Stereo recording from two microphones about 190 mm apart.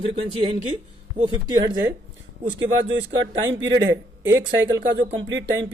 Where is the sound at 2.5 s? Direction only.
75° right (ahead or behind).